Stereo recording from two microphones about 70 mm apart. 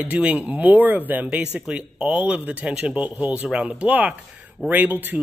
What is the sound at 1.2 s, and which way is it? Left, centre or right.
Speech, centre.